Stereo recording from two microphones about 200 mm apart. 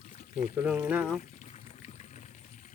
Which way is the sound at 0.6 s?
5° right (ahead or behind).